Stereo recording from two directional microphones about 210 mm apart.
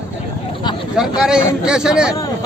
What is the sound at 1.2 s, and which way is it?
Speech, 5° right (ahead or behind).